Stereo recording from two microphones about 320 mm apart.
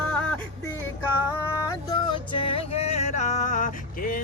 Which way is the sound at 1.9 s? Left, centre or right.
Centre.